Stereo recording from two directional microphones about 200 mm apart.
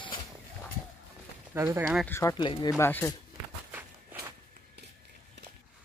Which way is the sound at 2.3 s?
25° left (ahead or behind).